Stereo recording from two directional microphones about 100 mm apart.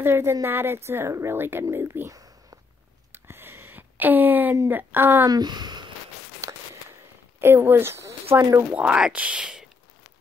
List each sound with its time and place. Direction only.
0.0 s speech: 25° right (ahead or behind)
3.1 s a sound: 25° right (ahead or behind)
4.6 s speech: 20° right (ahead or behind)
5.3 s speech: 45° right (ahead or behind)
6.4 s a sound: 25° right (ahead or behind)
8.7 s speech: 10° right (ahead or behind)